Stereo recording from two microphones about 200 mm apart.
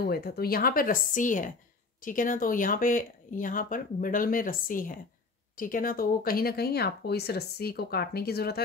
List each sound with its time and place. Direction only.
0.0 s speech: 50° left (ahead or behind)